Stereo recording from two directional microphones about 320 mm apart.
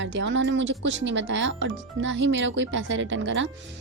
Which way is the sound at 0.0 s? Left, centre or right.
Right.